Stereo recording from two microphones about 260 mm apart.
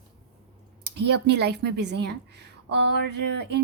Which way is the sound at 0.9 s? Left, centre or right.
Right.